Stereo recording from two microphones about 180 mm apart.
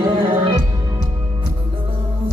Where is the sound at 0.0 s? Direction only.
25° right (ahead or behind).